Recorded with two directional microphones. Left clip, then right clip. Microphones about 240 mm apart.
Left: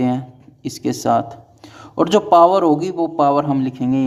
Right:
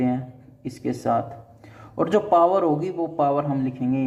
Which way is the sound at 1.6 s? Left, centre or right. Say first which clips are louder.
Left 7 dB; left.